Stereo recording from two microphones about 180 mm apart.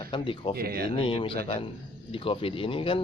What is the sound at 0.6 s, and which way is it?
Speech, 60° right (ahead or behind).